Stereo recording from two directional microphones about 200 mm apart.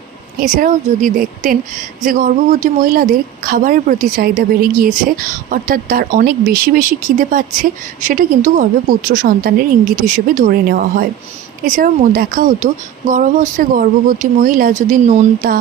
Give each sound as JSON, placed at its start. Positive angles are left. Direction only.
{"t": 0.3, "sound": "a woman's voice", "side_deg": -40}